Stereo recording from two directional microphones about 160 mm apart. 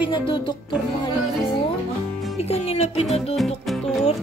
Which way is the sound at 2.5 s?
40° left (ahead or behind).